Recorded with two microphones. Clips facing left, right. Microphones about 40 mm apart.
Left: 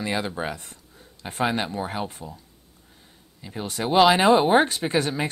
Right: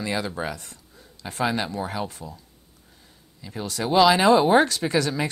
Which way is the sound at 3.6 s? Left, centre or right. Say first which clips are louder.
Even; left.